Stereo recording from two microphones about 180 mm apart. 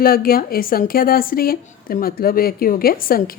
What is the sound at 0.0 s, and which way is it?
A woman's voice, 55° left (ahead or behind).